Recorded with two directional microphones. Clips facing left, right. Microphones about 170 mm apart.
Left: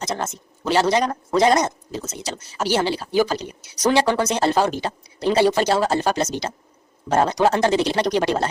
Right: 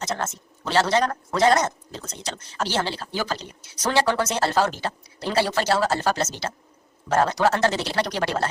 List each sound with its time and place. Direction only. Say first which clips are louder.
0.0 s speech: left 2 dB; 10° left (ahead or behind)